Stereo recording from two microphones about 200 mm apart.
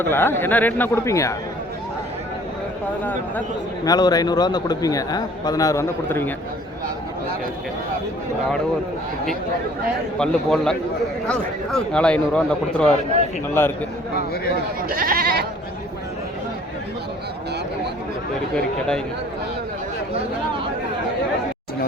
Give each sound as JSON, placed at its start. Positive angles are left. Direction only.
{"t": 0.0, "sound": "speech", "side_deg": 10}
{"t": 3.0, "sound": "speech", "side_deg": 10}
{"t": 3.8, "sound": "a man's voice", "side_deg": 20}
{"t": 10.2, "sound": "a man's voice", "side_deg": 5}
{"t": 14.8, "sound": "speech", "side_deg": -45}
{"t": 18.5, "sound": "a man's voice", "side_deg": 5}